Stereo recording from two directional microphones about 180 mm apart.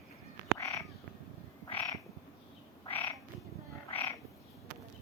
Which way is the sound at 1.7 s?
10° left (ahead or behind).